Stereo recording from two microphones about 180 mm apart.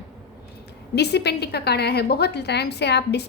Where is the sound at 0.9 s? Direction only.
65° left (ahead or behind).